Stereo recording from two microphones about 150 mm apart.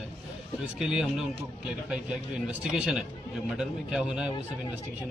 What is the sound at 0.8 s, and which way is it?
Speech, centre (ahead or behind).